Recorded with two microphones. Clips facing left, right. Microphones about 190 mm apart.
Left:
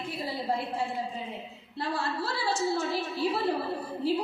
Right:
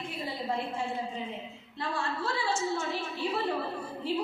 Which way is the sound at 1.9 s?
35° left (ahead or behind).